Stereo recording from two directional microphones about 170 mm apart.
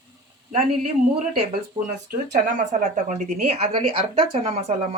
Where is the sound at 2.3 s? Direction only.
45° right (ahead or behind).